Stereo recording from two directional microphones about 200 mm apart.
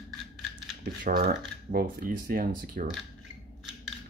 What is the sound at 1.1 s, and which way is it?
Speech, 40° right (ahead or behind).